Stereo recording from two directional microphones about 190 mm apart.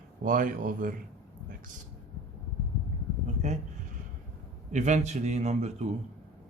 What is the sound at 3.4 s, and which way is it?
Speech, 35° right (ahead or behind).